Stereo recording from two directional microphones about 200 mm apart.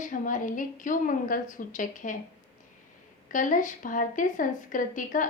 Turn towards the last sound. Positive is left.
turn(degrees=40)  # may be behind; listen again after turning